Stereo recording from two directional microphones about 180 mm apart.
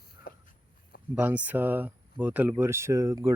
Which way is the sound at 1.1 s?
10° right (ahead or behind).